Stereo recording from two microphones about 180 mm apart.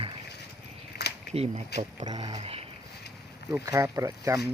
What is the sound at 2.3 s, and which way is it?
Speech, 35° right (ahead or behind).